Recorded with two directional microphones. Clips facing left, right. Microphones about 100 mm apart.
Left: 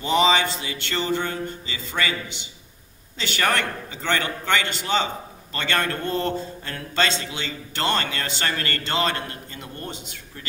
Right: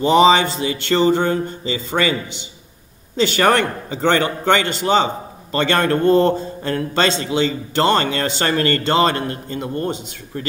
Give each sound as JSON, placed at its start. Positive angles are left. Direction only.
{"t": 0.1, "sound": "a man's voice", "side_deg": -30}
{"t": 5.6, "sound": "a man's voice", "side_deg": -45}
{"t": 7.1, "sound": "a man's voice", "side_deg": -30}